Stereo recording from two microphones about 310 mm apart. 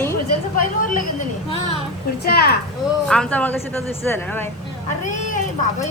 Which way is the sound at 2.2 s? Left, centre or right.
Left.